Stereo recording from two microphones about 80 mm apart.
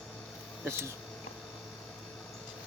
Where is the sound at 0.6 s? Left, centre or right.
Right.